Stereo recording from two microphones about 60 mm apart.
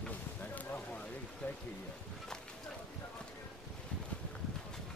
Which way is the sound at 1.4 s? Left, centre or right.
Left.